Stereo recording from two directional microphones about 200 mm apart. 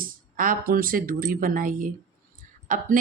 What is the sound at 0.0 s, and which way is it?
A woman's voice, 45° right (ahead or behind).